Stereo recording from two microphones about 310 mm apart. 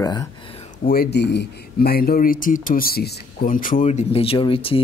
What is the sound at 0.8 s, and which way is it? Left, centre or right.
Speech, left.